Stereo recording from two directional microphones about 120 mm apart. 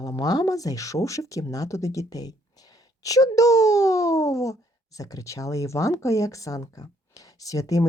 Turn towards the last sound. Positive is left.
turn(degrees=30)  # may be behind; listen again after turning